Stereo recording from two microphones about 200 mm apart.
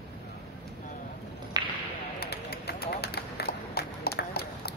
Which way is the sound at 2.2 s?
55° left (ahead or behind).